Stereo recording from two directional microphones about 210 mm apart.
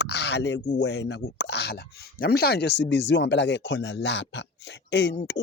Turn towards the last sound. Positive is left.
turn(degrees=55)  # may be behind; listen again after turning